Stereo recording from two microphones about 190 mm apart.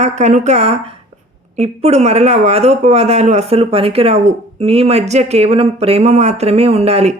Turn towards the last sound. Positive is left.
turn(degrees=-35)  # may be behind; listen again after turning